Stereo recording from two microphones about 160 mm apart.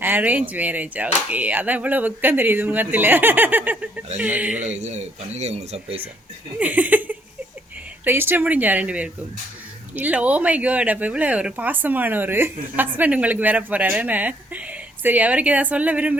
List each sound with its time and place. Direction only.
0.0 s a woman's voice: 10° right (ahead or behind)
4.8 s speech: 45° right (ahead or behind)
6.6 s laughter: 10° right (ahead or behind)
8.0 s a woman's voice: 15° right (ahead or behind)